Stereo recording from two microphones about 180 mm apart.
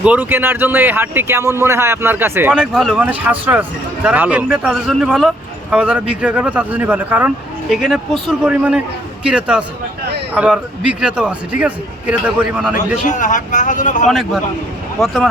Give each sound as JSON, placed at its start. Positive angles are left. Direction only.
{"t": 0.0, "sound": "speech", "side_deg": -10}
{"t": 12.7, "sound": "a man's voice", "side_deg": 45}
{"t": 14.1, "sound": "speech", "side_deg": 0}